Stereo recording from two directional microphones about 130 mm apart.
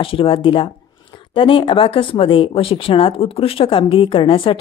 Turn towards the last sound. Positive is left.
turn(degrees=40)  # may be behind; listen again after turning